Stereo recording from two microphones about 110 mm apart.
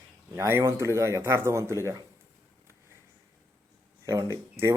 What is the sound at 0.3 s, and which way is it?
Speech, 25° right (ahead or behind).